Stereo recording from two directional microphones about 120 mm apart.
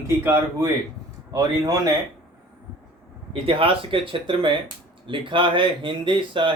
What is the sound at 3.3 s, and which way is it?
Speech, 50° right (ahead or behind).